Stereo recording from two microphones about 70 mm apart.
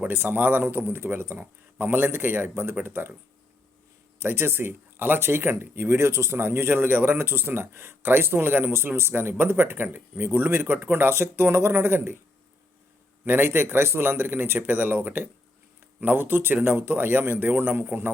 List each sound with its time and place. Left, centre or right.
0.0 s speech: right
4.2 s speech: right
13.2 s speech: right